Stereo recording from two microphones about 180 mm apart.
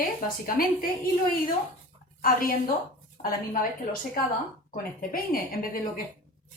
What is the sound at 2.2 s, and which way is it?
Speech, 55° left (ahead or behind).